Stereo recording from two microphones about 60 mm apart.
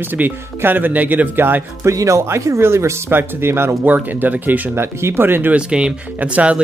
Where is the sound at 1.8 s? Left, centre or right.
Right.